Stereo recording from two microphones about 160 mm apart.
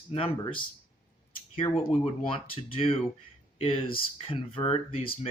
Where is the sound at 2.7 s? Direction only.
35° left (ahead or behind).